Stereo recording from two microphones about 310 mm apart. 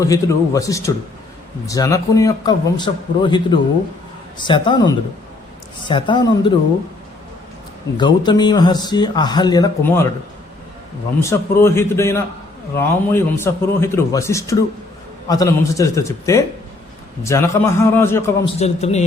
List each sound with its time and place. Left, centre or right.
0.0 s speech: centre
5.8 s speech: centre
7.9 s speech: centre
11.2 s speech: centre
18.6 s a man's voice: left